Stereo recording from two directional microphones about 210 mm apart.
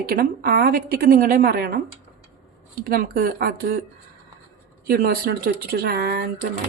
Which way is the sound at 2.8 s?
45° right (ahead or behind).